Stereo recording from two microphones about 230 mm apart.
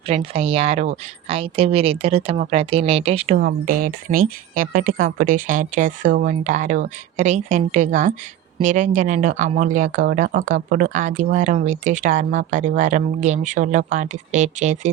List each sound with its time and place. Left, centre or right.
0.1 s a woman's voice: right
3.3 s speech: right